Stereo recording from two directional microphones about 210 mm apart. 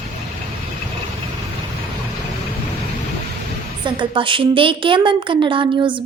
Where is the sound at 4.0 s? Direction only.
25° right (ahead or behind).